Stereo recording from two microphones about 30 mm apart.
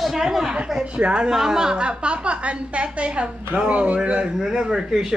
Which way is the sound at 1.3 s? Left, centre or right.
Centre.